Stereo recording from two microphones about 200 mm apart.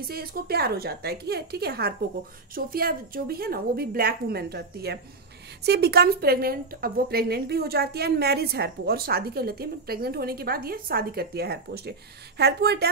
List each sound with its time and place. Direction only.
0.1 s a woman's voice: 50° right (ahead or behind)